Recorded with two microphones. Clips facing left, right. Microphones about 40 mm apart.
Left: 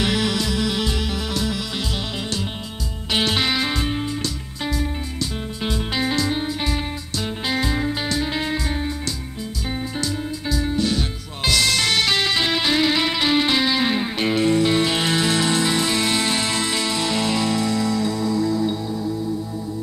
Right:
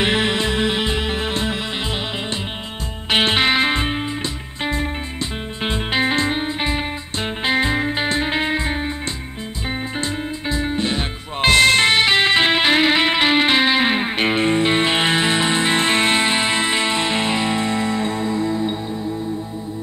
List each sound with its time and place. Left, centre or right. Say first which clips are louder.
0.0 s music: right 3 dB; right